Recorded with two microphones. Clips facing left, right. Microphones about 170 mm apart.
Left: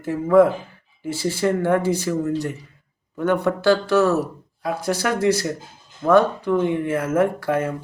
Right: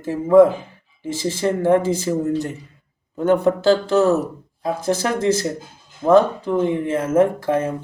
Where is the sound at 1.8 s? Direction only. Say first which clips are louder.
Even; 90° right.